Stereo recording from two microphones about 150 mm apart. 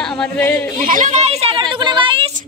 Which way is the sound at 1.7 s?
30° right (ahead or behind).